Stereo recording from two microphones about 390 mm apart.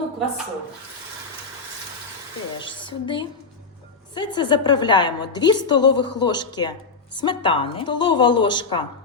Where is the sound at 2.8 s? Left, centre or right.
Centre.